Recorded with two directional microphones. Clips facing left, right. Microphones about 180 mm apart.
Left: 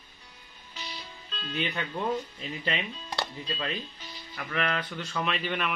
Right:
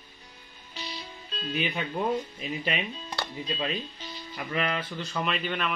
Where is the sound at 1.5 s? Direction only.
15° right (ahead or behind).